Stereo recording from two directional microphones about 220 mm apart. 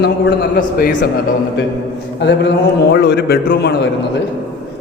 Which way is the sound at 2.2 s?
55° left (ahead or behind).